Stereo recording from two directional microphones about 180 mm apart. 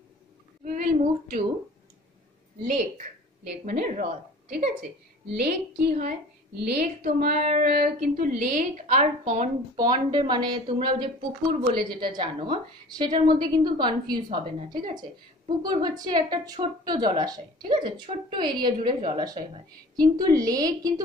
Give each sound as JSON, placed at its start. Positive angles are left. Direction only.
{"t": 0.7, "sound": "a woman's voice", "side_deg": -50}
{"t": 3.4, "sound": "a woman's voice", "side_deg": -55}
{"t": 9.8, "sound": "a woman's voice", "side_deg": -25}